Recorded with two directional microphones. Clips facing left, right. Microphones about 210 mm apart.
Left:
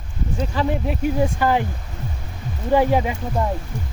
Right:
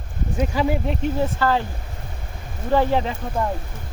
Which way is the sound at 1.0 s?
15° left (ahead or behind).